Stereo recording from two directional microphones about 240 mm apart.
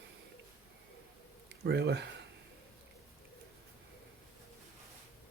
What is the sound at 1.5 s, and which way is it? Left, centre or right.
Speech, right.